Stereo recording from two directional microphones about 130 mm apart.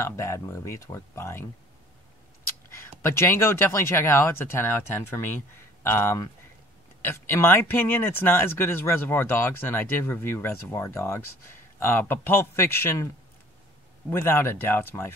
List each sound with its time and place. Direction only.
0.0 s speech: 20° left (ahead or behind)
2.7 s speech: 20° left (ahead or behind)
14.1 s speech: 20° left (ahead or behind)